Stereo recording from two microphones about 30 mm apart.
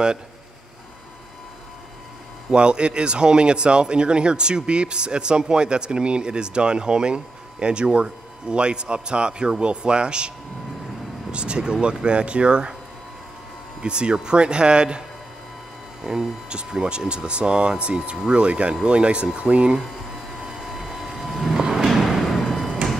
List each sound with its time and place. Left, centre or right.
2.5 s speech: right
11.3 s speech: right
13.7 s speech: right
16.0 s speech: centre
16.8 s speech: right
20.6 s vehicle: centre
21.3 s vehicle: centre
22.2 s thump: centre